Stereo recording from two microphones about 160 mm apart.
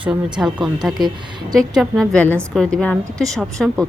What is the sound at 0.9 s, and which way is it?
Speech, 25° right (ahead or behind).